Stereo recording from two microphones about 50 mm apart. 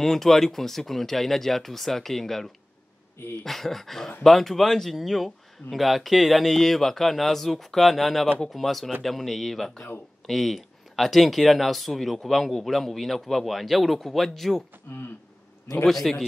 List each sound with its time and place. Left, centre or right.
0.0 s speech: centre
14.9 s speech: left
15.9 s speech: centre